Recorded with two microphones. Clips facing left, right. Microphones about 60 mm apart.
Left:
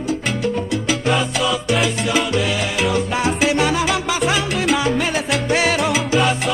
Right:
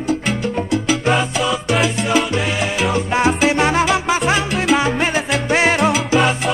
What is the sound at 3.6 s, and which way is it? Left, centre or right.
Music, right.